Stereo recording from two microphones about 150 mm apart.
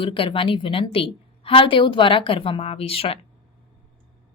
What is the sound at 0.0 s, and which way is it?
Speech, 35° left (ahead or behind).